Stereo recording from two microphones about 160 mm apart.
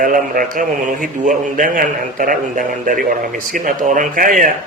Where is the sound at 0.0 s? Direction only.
60° right (ahead or behind).